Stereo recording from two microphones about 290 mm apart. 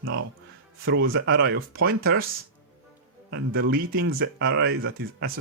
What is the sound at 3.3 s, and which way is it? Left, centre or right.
Speech, right.